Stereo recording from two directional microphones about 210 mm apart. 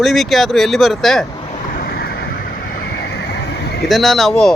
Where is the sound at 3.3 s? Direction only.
50° left (ahead or behind).